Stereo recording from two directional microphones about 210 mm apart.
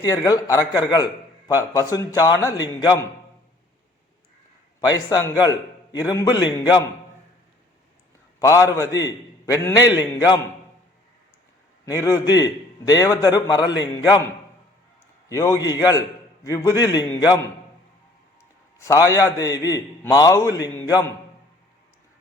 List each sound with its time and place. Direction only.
0.0 s a man's voice: 15° left (ahead or behind)
4.9 s a man's voice: 20° left (ahead or behind)
8.4 s a man's voice: 15° left (ahead or behind)
11.9 s a man's voice: 15° left (ahead or behind)
15.3 s a man's voice: 15° left (ahead or behind)
18.8 s a man's voice: 15° left (ahead or behind)